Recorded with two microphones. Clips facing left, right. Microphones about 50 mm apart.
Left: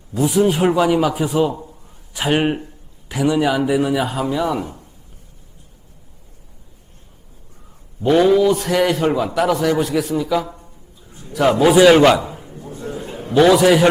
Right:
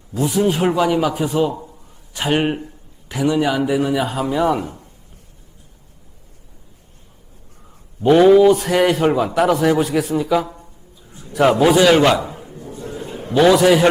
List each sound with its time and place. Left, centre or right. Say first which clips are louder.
0.1 s speech: left 2 dB; centre
8.0 s a man's voice: right 3 dB; centre
11.6 s speech: left 4 dB; centre
12.6 s a sound: left 2 dB; left
13.3 s speech: even; centre